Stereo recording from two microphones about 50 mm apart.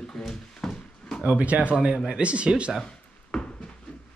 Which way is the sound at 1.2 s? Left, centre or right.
Right.